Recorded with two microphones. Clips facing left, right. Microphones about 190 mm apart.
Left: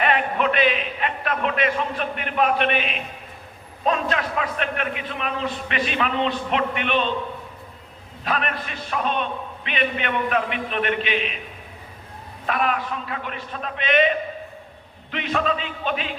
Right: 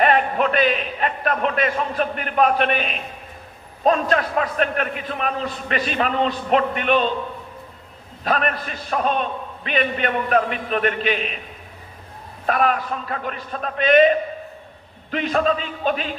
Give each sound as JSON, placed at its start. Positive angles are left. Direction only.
{"t": 0.0, "sound": "a man's voice", "side_deg": -40}
{"t": 8.2, "sound": "a man's voice", "side_deg": -40}
{"t": 12.5, "sound": "a man's voice", "side_deg": -40}